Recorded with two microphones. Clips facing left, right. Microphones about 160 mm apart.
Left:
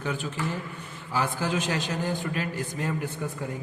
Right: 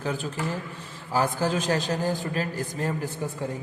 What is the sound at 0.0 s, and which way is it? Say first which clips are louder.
A man's voice: right 1 dB; 35° right (ahead or behind).